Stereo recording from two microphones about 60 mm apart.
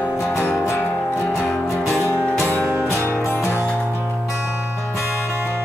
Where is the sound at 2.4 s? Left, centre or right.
Left.